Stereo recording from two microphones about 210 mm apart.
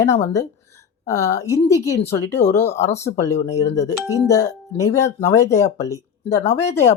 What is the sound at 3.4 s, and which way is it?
Speech, 15° left (ahead or behind).